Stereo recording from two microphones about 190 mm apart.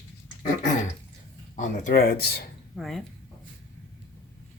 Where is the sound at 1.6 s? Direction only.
45° left (ahead or behind).